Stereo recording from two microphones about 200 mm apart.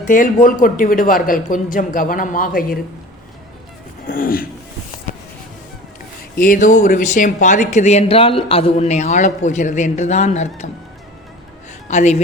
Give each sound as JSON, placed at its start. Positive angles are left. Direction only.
{"t": 0.0, "sound": "a man's voice", "side_deg": 40}
{"t": 4.0, "sound": "a man's voice", "side_deg": 45}
{"t": 6.4, "sound": "speech", "side_deg": 40}
{"t": 11.9, "sound": "a woman's voice", "side_deg": 35}